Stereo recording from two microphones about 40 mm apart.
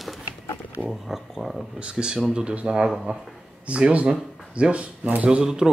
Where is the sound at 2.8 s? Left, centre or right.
Centre.